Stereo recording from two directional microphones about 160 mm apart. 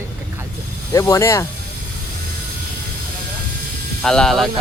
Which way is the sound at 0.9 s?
20° left (ahead or behind).